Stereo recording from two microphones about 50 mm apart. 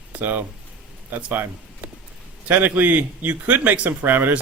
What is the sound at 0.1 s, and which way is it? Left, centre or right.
Speech, right.